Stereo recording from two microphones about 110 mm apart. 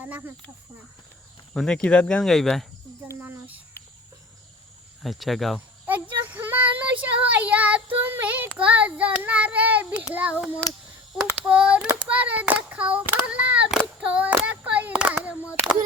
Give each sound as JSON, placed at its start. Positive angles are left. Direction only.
{"t": 0.0, "sound": "speech", "side_deg": -15}
{"t": 1.5, "sound": "speech", "side_deg": 5}
{"t": 3.1, "sound": "speech", "side_deg": -15}
{"t": 5.0, "sound": "speech", "side_deg": 0}
{"t": 5.5, "sound": "child singing", "side_deg": -15}
{"t": 11.4, "sound": "speech", "side_deg": -10}
{"t": 12.0, "sound": "child singing", "side_deg": -10}
{"t": 14.4, "sound": "a sound", "side_deg": -15}